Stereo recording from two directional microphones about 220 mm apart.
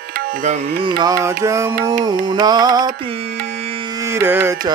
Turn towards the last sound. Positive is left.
turn(degrees=-10)  # may be behind; listen again after turning